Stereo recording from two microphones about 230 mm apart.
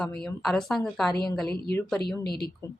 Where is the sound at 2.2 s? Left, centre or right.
Left.